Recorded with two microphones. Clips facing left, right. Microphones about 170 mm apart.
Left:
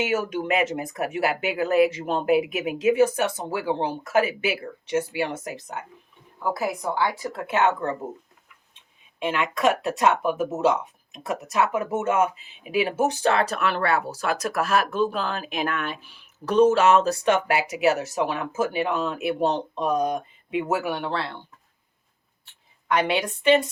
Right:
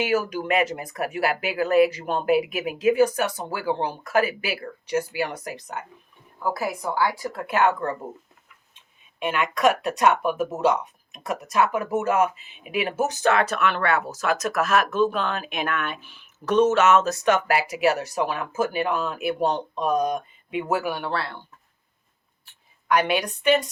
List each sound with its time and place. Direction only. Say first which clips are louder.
0.1 s speech: right 1 dB; 25° left (ahead or behind)
6.9 s speech: right 1 dB; 20° left (ahead or behind)
9.1 s speech: even; 25° left (ahead or behind)
22.9 s speech: right 1 dB; 25° left (ahead or behind)